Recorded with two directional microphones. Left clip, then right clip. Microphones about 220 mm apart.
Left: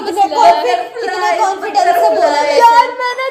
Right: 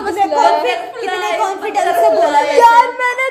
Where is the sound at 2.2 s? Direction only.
5° right (ahead or behind).